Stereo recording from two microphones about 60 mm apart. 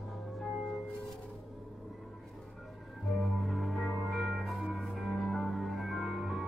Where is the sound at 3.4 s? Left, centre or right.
Centre.